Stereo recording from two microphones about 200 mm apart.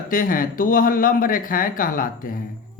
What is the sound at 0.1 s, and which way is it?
Speech, 45° left (ahead or behind).